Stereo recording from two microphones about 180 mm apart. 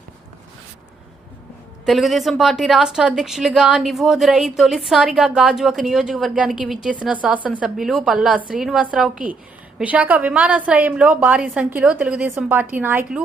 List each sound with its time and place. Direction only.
1.8 s a woman's voice: centre (ahead or behind)